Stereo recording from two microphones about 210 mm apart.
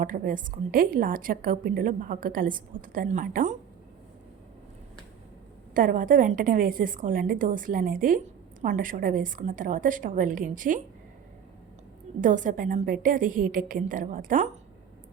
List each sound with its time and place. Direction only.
0.0 s a woman's voice: 40° right (ahead or behind)
5.7 s a woman's voice: 40° right (ahead or behind)
12.2 s a woman's voice: 35° right (ahead or behind)